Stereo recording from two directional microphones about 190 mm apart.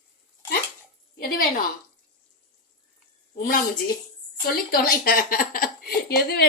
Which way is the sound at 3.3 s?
50° left (ahead or behind).